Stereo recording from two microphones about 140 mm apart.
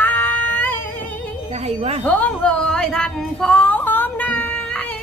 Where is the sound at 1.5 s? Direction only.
50° right (ahead or behind).